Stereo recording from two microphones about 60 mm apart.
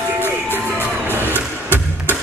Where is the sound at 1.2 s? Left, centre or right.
Left.